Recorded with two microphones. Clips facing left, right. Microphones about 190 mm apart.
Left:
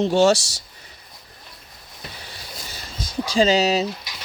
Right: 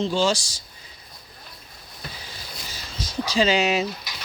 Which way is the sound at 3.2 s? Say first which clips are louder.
Left 3 dB; 45° left (ahead or behind).